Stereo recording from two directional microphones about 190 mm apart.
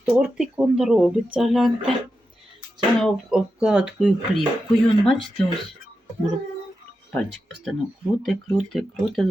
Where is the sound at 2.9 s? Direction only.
Centre (ahead or behind).